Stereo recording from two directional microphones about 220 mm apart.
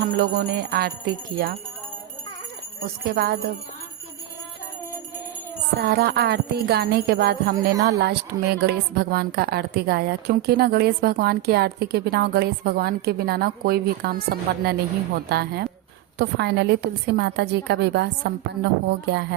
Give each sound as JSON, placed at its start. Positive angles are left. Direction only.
{"t": 0.2, "sound": "a woman's voice", "side_deg": -45}
{"t": 2.8, "sound": "a woman's voice", "side_deg": -45}
{"t": 5.8, "sound": "a woman's voice", "side_deg": -50}